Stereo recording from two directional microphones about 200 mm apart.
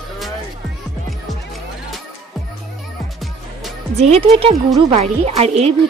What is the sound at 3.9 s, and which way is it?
A woman's voice, 30° right (ahead or behind).